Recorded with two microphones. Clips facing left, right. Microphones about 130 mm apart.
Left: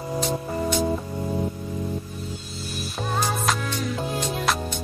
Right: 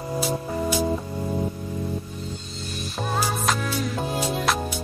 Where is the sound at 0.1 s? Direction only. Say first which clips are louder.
Even; 5° right (ahead or behind).